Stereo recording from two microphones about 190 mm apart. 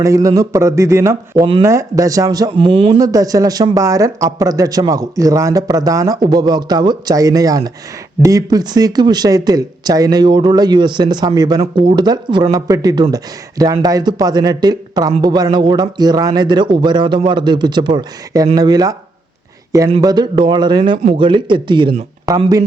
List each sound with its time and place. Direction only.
0.0 s speech: 15° right (ahead or behind)
3.0 s speech: 20° right (ahead or behind)
20.0 s speech: 20° right (ahead or behind)